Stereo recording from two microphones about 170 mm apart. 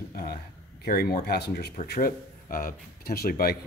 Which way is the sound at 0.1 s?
65° left (ahead or behind).